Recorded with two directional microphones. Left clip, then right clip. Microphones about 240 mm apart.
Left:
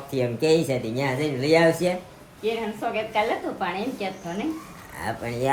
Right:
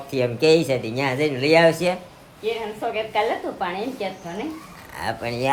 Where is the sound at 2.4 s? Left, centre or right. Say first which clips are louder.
Right 1 dB; right.